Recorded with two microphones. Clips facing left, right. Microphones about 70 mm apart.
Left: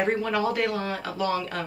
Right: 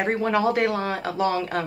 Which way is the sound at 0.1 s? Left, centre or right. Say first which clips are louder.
Right 4 dB; right.